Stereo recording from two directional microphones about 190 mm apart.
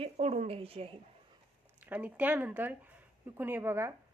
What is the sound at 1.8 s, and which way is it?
Speech, 10° right (ahead or behind).